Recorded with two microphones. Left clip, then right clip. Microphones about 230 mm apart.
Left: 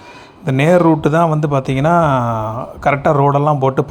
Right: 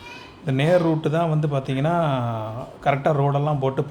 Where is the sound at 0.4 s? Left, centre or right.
Left.